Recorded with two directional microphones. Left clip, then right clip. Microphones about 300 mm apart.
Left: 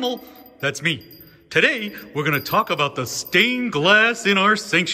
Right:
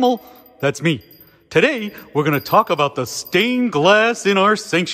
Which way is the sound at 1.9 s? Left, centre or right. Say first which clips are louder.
Right 4 dB; centre.